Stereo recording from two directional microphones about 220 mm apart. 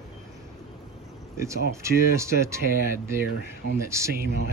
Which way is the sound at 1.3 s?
15° right (ahead or behind).